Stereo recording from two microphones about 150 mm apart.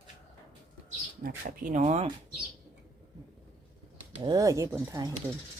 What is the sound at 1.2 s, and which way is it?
Speech, 65° right (ahead or behind).